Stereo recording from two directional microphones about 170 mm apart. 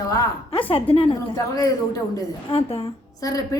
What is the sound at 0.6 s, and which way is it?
Speech, 35° left (ahead or behind).